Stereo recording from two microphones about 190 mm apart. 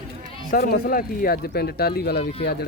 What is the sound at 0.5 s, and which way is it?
Speech, 50° left (ahead or behind).